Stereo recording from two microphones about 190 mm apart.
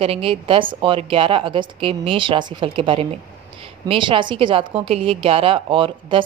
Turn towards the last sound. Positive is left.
turn(degrees=-25)  # may be behind; listen again after turning